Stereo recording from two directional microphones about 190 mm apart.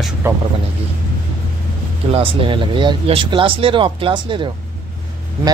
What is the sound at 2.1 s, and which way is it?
Speech, 25° right (ahead or behind).